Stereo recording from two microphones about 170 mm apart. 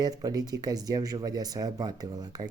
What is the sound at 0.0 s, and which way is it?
Speech, 20° right (ahead or behind).